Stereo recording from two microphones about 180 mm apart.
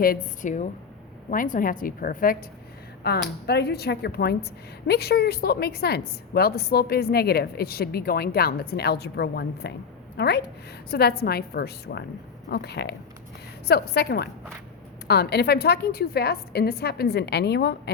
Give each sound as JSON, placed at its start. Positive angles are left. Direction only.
{"t": 0.0, "sound": "a woman's voice", "side_deg": 50}
{"t": 3.0, "sound": "a woman's voice", "side_deg": 65}